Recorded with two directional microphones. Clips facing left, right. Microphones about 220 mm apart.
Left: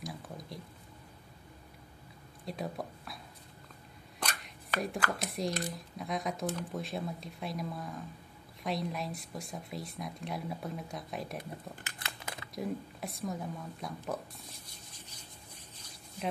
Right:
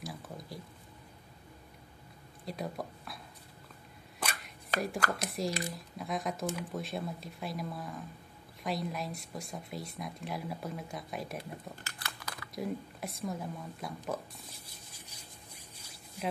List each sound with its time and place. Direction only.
2.4 s speech: centre (ahead or behind)
4.2 s a sound: 5° right (ahead or behind)
5.2 s speech: centre (ahead or behind)
11.7 s crumpling: 20° left (ahead or behind)
12.5 s speech: centre (ahead or behind)
15.0 s a sound: 10° right (ahead or behind)